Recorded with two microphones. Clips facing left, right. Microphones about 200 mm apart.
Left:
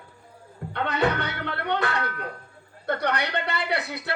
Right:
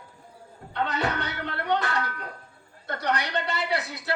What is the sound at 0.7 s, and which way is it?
Speech, 60° left (ahead or behind).